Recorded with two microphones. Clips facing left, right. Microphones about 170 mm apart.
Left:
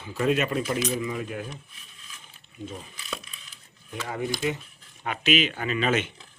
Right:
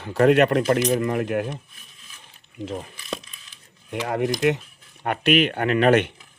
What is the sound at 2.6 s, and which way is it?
Speech, 65° right (ahead or behind).